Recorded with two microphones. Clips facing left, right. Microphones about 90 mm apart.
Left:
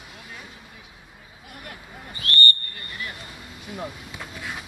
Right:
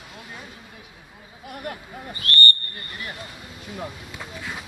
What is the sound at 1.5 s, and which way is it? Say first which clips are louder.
Speech: right 7 dB; 40° right (ahead or behind).